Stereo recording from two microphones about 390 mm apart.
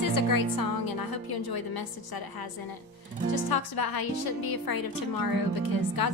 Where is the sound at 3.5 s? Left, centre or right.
Left.